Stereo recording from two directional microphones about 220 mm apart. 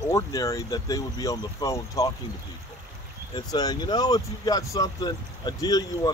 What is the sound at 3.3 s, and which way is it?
Speech, 20° left (ahead or behind).